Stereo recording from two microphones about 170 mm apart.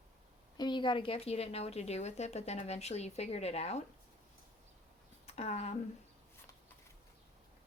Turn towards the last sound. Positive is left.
turn(degrees=40)  # may be behind; listen again after turning